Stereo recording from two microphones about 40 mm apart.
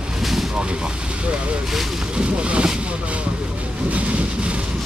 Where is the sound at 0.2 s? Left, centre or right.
Centre.